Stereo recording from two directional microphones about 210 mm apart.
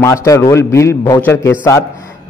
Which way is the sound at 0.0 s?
15° left (ahead or behind).